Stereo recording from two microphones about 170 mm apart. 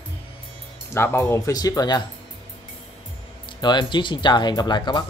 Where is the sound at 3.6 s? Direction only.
25° left (ahead or behind).